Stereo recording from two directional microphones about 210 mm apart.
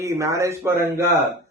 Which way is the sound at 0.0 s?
15° right (ahead or behind).